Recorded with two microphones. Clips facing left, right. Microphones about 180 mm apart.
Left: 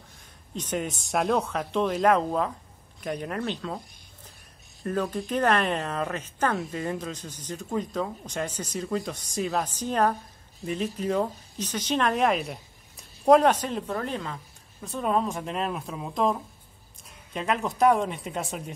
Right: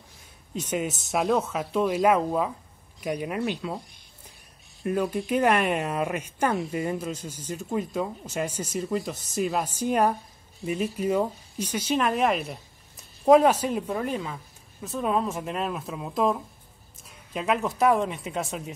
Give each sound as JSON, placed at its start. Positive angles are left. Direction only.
{"t": 0.6, "sound": "speech", "side_deg": -5}
{"t": 4.8, "sound": "speech", "side_deg": -10}